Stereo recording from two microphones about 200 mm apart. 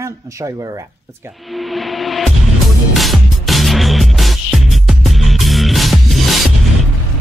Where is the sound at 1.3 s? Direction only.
Centre (ahead or behind).